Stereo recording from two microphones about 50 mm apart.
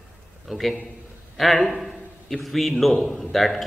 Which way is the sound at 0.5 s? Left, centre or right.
Centre.